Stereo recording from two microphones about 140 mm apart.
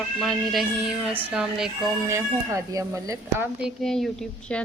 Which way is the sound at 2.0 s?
20° right (ahead or behind).